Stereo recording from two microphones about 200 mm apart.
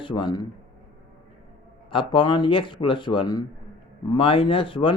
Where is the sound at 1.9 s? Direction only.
25° left (ahead or behind).